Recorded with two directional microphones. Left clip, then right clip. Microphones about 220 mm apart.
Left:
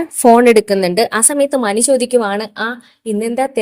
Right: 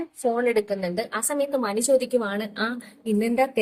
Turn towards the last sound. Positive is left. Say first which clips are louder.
# left 6 dB
turn(degrees=30)  # may be behind; listen again after turning